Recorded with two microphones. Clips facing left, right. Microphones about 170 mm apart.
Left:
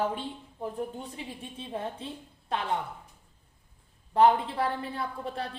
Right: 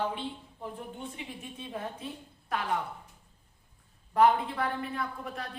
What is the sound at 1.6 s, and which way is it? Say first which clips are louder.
A woman's voice: left 3 dB; 30° left (ahead or behind).